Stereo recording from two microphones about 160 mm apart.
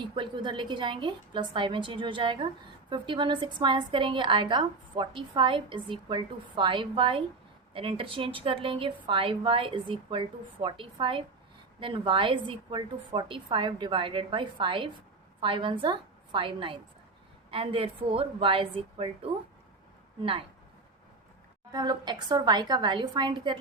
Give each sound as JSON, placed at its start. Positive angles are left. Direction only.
{"t": 0.0, "sound": "a woman's voice", "side_deg": -30}
{"t": 21.7, "sound": "a woman's voice", "side_deg": -25}